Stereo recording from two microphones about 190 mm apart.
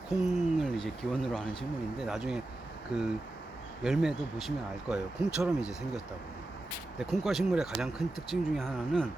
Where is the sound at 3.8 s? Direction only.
5° right (ahead or behind).